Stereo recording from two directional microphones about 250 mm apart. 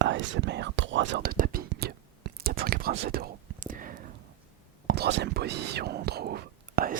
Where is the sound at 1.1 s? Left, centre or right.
Right.